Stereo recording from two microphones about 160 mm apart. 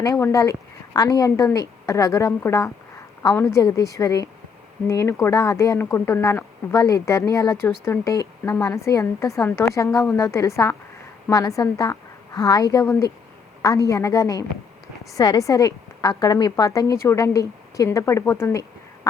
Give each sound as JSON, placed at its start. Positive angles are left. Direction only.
{"t": 0.0, "sound": "a woman's voice", "side_deg": 20}